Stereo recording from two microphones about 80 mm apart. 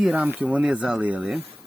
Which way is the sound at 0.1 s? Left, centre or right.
Right.